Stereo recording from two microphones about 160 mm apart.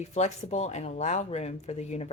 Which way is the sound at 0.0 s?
45° left (ahead or behind).